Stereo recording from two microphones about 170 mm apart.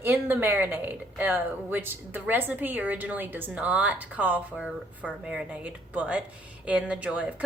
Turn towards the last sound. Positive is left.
turn(degrees=-10)  # may be behind; listen again after turning